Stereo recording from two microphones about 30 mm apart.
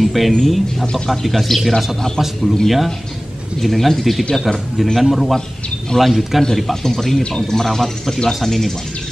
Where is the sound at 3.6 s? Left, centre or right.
Centre.